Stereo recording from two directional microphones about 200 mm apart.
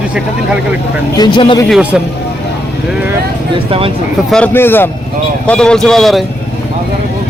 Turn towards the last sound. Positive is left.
turn(degrees=0)  # may be behind; listen again after turning